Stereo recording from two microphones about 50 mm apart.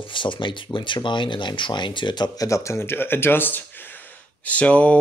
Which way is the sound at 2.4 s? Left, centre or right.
Left.